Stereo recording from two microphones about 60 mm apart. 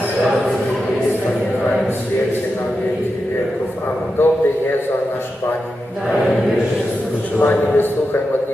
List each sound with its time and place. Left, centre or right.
4.2 s a man's voice: left
7.3 s a man's voice: left